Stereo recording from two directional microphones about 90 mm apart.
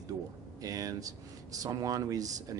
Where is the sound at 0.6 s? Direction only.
40° right (ahead or behind).